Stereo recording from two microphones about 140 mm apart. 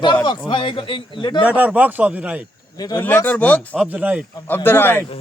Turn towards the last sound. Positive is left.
turn(degrees=15)  # may be behind; listen again after turning